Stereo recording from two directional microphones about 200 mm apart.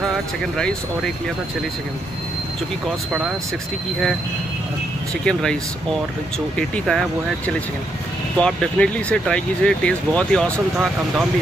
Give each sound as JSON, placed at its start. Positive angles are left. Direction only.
{"t": 0.6, "sound": "speech", "side_deg": 5}
{"t": 3.1, "sound": "speech", "side_deg": -5}
{"t": 5.2, "sound": "speech", "side_deg": 5}
{"t": 6.7, "sound": "speech", "side_deg": 5}